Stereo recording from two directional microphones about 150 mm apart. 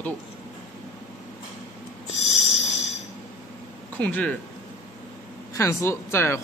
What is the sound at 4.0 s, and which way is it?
Speech, 10° left (ahead or behind).